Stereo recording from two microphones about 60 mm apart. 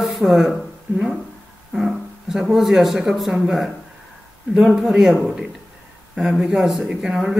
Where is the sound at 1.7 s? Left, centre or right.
Centre.